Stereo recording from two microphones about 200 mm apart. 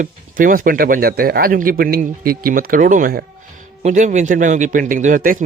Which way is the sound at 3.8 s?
35° right (ahead or behind).